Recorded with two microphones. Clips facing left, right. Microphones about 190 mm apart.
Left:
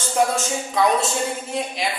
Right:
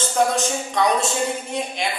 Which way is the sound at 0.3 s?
5° left (ahead or behind).